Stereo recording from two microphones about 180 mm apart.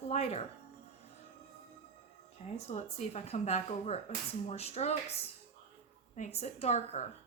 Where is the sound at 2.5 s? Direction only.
35° left (ahead or behind).